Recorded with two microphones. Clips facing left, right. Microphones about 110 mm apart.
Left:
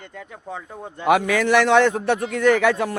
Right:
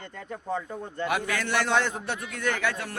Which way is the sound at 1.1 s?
90° left.